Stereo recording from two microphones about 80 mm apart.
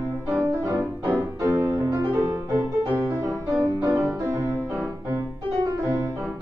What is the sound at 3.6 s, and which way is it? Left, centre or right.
Piano, right.